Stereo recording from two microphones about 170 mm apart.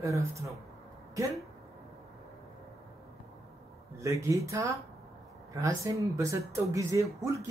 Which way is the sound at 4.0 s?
20° right (ahead or behind).